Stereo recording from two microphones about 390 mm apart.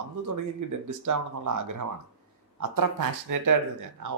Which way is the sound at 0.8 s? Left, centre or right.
Right.